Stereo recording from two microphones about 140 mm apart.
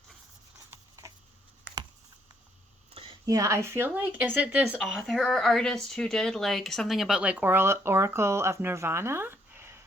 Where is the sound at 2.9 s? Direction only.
40° right (ahead or behind).